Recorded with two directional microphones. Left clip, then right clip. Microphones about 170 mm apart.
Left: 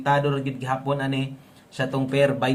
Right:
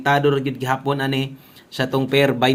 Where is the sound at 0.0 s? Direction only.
45° right (ahead or behind).